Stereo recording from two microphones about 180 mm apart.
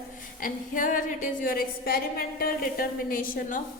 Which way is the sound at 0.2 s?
50° left (ahead or behind).